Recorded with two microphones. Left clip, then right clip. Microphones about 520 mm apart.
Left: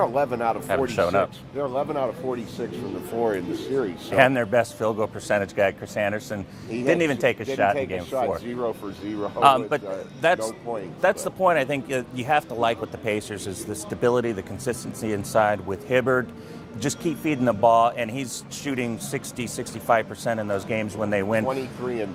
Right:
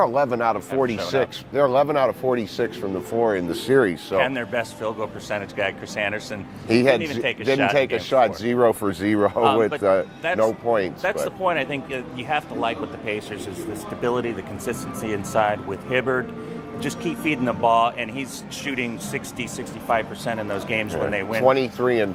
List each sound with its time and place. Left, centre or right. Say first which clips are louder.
0.0 s speech: right 3 dB; right
1.5 s speech: right 8 dB; right
3.7 s speech: right 9 dB; right
4.2 s speech: left 6 dB; left
6.7 s speech: right 7 dB; right
7.0 s speech: left 2 dB; left
7.8 s speech: right 8 dB; right
8.4 s speech: right 10 dB; right
9.4 s speech: left 5 dB; left
10.4 s speech: right 10 dB; right
11.0 s speech: left 2 dB; left
21.4 s speech: right 9 dB; right